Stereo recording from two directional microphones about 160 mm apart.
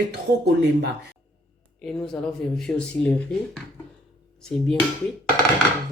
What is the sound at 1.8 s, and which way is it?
Speech, 5° left (ahead or behind).